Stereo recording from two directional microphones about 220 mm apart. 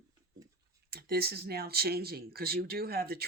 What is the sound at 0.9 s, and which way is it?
Speech, 45° right (ahead or behind).